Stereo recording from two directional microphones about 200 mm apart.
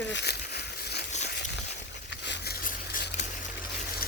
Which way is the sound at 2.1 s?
55° left (ahead or behind).